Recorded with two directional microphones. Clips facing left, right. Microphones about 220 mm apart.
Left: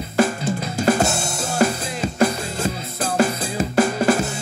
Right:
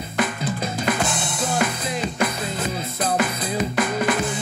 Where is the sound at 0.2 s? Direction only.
25° left (ahead or behind).